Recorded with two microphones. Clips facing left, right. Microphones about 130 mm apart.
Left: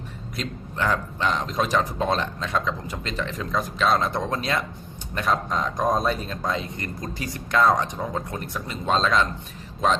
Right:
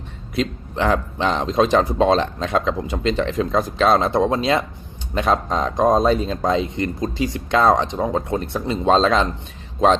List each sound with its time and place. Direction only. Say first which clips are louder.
1.2 s speech: right 7 dB; 25° right (ahead or behind)